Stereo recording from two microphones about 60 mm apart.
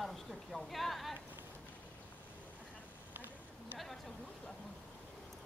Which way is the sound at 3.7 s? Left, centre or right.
Centre.